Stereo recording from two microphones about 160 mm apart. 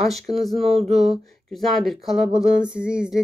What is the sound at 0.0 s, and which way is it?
Speech, centre (ahead or behind).